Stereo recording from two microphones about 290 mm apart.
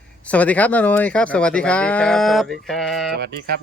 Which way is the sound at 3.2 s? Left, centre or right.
Right.